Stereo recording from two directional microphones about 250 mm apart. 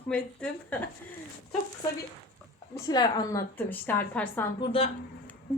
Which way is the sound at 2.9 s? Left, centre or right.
Centre.